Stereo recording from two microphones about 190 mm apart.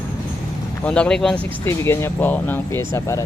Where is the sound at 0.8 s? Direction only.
5° left (ahead or behind).